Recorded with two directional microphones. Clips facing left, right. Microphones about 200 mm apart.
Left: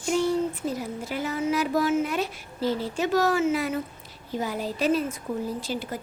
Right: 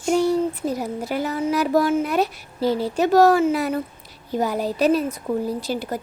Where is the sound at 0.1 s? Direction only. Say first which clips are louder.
Right 5 dB; 40° right (ahead or behind).